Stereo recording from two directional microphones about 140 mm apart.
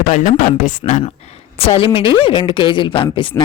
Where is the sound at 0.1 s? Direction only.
60° left (ahead or behind).